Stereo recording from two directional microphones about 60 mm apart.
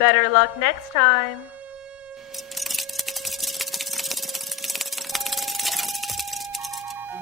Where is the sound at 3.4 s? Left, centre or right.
Centre.